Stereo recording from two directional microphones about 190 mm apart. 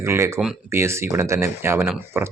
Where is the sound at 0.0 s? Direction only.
15° right (ahead or behind).